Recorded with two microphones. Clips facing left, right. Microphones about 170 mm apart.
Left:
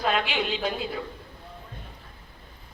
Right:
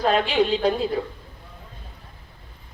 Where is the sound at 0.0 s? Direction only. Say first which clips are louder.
Right 6 dB; 35° right (ahead or behind).